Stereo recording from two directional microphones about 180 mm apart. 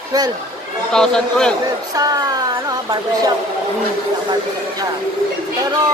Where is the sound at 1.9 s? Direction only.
20° right (ahead or behind).